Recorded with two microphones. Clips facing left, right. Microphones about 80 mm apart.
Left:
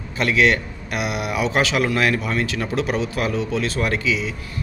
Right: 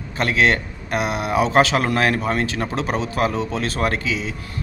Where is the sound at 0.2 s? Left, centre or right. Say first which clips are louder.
Even; right.